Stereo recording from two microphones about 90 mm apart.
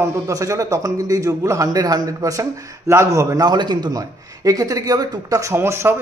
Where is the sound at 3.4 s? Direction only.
50° right (ahead or behind); by 6.0 s 30° right (ahead or behind).